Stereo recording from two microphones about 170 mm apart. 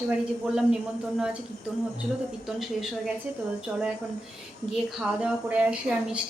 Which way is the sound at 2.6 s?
Centre (ahead or behind).